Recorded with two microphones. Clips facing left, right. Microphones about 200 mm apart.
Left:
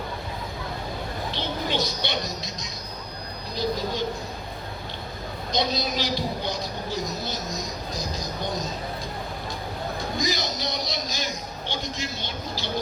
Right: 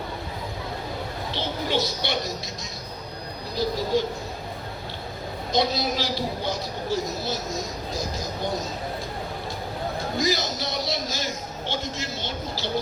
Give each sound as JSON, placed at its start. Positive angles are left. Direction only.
{"t": 1.3, "sound": "music", "side_deg": 15}
{"t": 3.5, "sound": "speech", "side_deg": 20}
{"t": 5.5, "sound": "a man's voice", "side_deg": 20}
{"t": 10.2, "sound": "a man's voice", "side_deg": 15}